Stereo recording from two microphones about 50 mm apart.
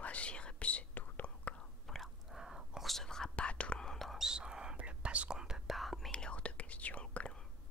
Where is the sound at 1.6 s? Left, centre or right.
Centre.